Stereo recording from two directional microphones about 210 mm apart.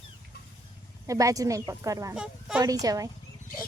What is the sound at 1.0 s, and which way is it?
Speech, 15° right (ahead or behind).